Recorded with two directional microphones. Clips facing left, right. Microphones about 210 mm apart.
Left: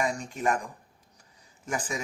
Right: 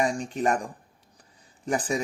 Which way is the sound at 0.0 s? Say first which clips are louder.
Right 3 dB; 35° right (ahead or behind).